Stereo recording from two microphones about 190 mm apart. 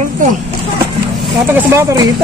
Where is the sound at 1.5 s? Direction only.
15° right (ahead or behind).